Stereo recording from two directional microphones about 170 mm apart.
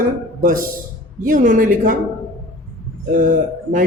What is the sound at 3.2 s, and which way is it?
Speech, 50° right (ahead or behind).